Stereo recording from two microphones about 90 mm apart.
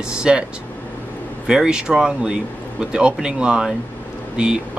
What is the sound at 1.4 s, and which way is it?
Speech, 10° right (ahead or behind).